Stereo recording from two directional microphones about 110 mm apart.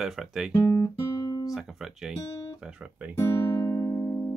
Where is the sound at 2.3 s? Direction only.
30° left (ahead or behind).